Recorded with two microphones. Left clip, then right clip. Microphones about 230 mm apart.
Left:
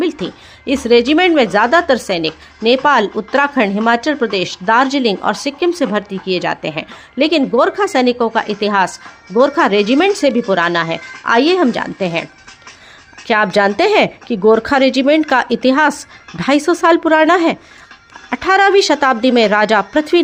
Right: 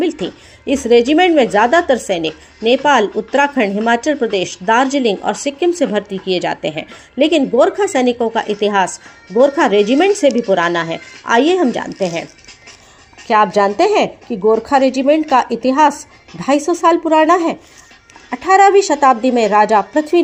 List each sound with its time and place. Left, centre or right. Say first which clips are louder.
0.1 s a sound: right 1 dB; centre
0.9 s a woman's voice: even; centre
13.6 s a woman's voice: left 1 dB; left